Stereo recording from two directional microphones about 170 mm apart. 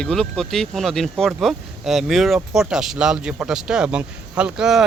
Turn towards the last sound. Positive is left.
turn(degrees=-5)  # may be behind; listen again after turning